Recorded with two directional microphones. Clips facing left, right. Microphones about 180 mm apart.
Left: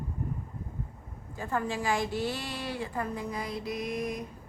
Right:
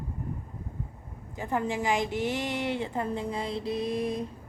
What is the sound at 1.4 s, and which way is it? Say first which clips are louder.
A woman's voice: right 2 dB; 20° right (ahead or behind).